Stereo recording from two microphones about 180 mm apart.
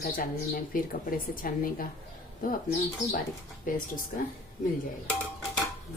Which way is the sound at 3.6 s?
50° left (ahead or behind).